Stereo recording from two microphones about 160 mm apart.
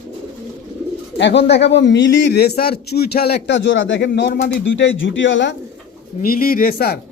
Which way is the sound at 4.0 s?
90° left.